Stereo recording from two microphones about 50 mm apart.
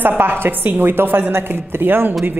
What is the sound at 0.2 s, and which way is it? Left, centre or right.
A woman's voice, right.